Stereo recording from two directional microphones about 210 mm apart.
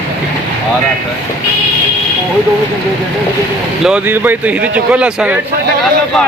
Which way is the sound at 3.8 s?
5° right (ahead or behind).